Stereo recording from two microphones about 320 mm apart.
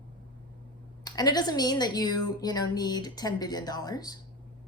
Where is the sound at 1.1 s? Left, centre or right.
Centre.